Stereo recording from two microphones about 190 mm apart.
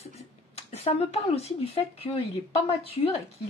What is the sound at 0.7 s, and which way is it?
Speech, 35° left (ahead or behind).